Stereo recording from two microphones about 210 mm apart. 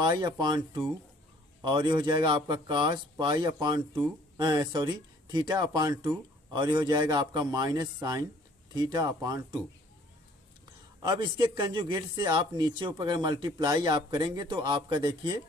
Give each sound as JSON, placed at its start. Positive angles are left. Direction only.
{"t": 0.0, "sound": "speech", "side_deg": -20}
{"t": 11.0, "sound": "speech", "side_deg": -20}